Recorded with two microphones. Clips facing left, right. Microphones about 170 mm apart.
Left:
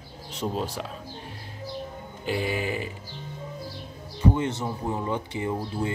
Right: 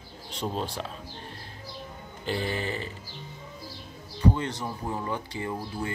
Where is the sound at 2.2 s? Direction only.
10° left (ahead or behind).